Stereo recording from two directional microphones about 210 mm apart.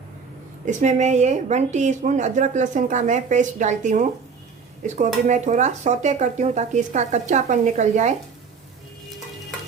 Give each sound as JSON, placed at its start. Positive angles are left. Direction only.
{"t": 0.6, "sound": "speech", "side_deg": -35}